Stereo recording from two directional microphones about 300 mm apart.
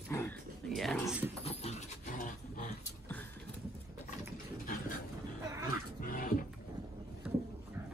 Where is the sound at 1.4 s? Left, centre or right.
Left.